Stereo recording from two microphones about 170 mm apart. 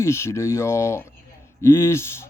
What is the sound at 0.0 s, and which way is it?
Speech, 15° left (ahead or behind).